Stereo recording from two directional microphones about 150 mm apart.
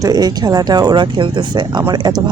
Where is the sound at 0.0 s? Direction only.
25° right (ahead or behind).